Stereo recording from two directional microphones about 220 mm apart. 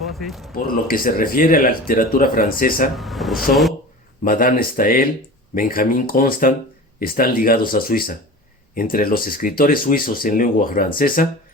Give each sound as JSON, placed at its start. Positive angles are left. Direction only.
{"t": 0.0, "sound": "speech", "side_deg": 0}
{"t": 0.5, "sound": "speech", "side_deg": 40}
{"t": 2.9, "sound": "speech", "side_deg": 0}
{"t": 4.2, "sound": "speech", "side_deg": 40}